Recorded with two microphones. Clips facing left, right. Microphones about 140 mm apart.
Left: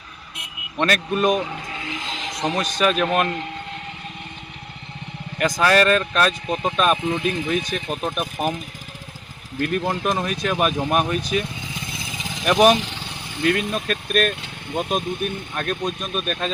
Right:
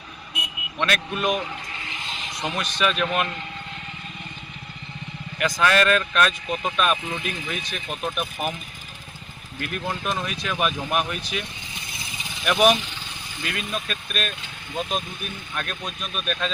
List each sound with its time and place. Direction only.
0.8 s speech: 40° left (ahead or behind)
2.0 s a sound: 90° left
2.4 s speech: 35° left (ahead or behind)
5.5 s speech: 35° left (ahead or behind)
9.6 s speech: 40° left (ahead or behind)
12.1 s vehicle: 90° left
12.4 s speech: 40° left (ahead or behind)
13.4 s speech: 50° left (ahead or behind)